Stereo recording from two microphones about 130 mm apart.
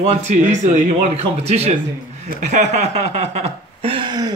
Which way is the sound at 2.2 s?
70° right (ahead or behind).